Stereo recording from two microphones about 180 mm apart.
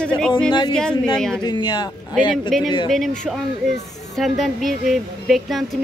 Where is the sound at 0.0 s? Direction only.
5° left (ahead or behind).